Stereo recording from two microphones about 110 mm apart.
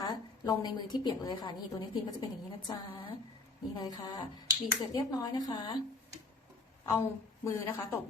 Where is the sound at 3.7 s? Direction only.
40° left (ahead or behind).